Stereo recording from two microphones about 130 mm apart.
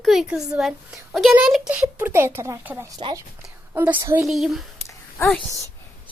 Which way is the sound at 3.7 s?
20° right (ahead or behind).